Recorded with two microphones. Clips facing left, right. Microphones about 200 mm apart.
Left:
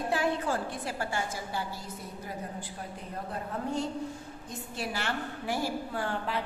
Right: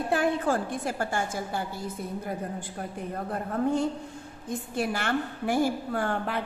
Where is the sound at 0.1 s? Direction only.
50° right (ahead or behind).